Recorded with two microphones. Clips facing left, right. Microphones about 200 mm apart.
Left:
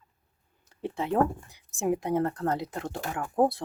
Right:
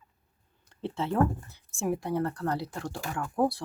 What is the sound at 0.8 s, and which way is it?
Speech, 15° left (ahead or behind).